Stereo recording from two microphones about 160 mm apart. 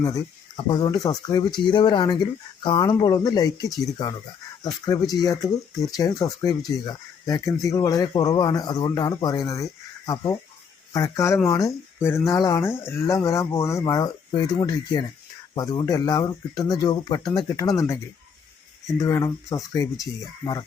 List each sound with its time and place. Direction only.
0.0 s speech: 25° left (ahead or behind)
10.9 s speech: 20° left (ahead or behind)